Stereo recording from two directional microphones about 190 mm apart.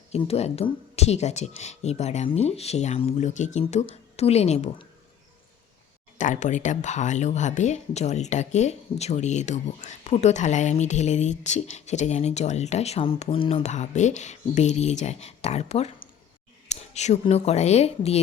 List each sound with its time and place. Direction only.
0.1 s speech: 35° left (ahead or behind)
6.1 s speech: 40° left (ahead or behind)